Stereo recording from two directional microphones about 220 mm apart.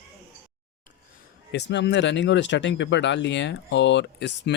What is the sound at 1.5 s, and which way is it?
Speech, 50° left (ahead or behind).